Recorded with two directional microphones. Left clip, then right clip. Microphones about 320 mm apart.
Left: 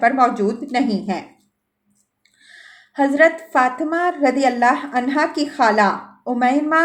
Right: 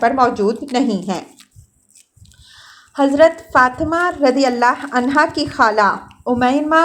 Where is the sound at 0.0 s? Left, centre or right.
Centre.